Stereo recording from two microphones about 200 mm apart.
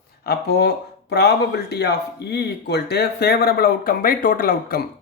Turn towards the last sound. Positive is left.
turn(degrees=45)  # may be behind; listen again after turning